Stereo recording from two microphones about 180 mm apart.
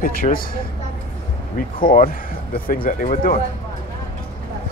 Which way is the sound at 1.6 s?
50° left (ahead or behind).